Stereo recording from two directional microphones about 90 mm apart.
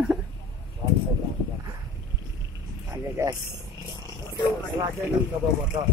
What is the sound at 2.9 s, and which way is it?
Speech, 30° right (ahead or behind).